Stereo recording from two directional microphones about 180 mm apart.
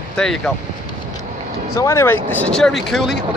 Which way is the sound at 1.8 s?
15° left (ahead or behind).